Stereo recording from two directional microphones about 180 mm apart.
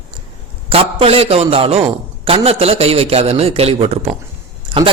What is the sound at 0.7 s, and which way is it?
A man's voice, 35° right (ahead or behind).